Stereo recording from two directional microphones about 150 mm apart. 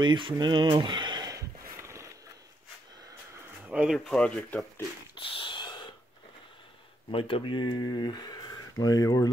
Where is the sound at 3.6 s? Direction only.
10° right (ahead or behind).